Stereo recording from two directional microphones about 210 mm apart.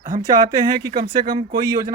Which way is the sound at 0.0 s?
40° right (ahead or behind).